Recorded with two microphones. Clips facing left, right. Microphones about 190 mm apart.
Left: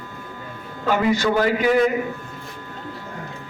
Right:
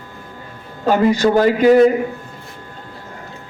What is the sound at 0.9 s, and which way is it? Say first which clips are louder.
A man's voice: right 5 dB; 40° right (ahead or behind).